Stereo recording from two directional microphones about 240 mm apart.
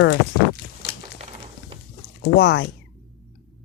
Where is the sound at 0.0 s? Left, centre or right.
Left.